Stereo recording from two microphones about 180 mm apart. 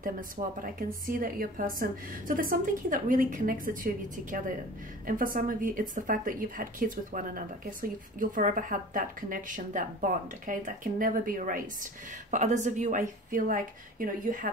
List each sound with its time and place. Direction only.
0.0 s a woman's voice: 50° right (ahead or behind)